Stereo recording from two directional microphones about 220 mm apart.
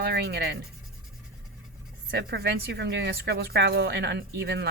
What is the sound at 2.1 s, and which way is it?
A woman's voice, 45° right (ahead or behind).